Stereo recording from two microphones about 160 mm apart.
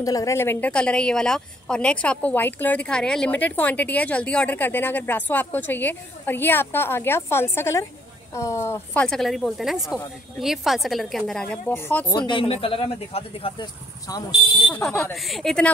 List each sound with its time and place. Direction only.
0.0 s a woman's voice: 20° left (ahead or behind)
12.1 s a man's voice: 30° left (ahead or behind)
14.7 s a woman's voice: 5° left (ahead or behind)